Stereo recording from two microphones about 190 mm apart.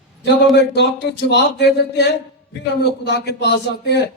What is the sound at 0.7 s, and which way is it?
A man's voice, 65° left (ahead or behind).